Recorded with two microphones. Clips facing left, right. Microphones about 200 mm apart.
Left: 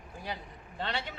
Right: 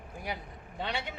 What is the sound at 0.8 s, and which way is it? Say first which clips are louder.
Speech: even; 15° right (ahead or behind).